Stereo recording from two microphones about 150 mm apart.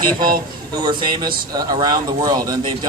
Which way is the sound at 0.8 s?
30° right (ahead or behind).